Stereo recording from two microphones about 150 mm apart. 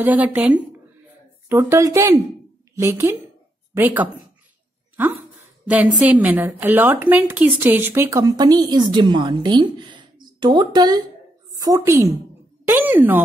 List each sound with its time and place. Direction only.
0.0 s a woman's voice: 10° right (ahead or behind)
5.7 s a woman's voice: 10° right (ahead or behind)